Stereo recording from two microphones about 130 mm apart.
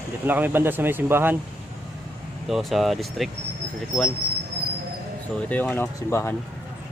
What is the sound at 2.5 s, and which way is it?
Speech, centre (ahead or behind).